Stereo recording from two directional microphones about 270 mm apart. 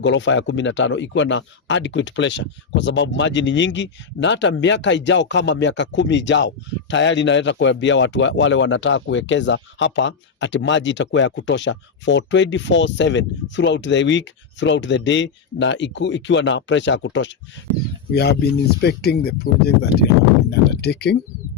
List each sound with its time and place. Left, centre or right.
0.0 s speech: left